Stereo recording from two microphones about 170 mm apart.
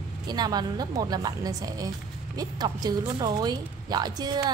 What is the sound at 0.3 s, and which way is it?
A woman's voice, 25° right (ahead or behind).